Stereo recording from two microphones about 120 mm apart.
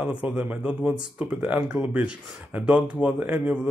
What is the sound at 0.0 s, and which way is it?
Speech, 10° right (ahead or behind).